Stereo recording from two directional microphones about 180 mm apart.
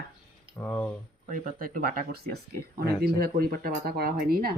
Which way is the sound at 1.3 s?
50° right (ahead or behind).